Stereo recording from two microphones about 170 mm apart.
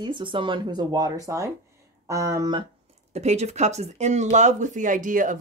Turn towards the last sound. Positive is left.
turn(degrees=-50)  # may be behind; listen again after turning